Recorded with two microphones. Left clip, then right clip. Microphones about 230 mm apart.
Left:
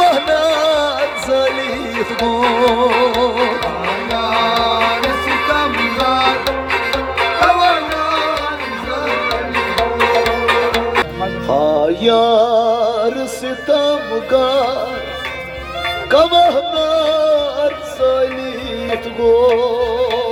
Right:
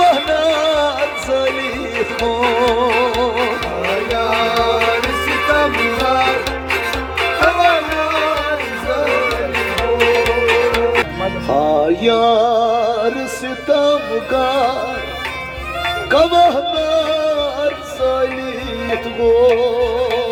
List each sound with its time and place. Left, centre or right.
0.0 s music: left
11.4 s music: left
16.0 s music: left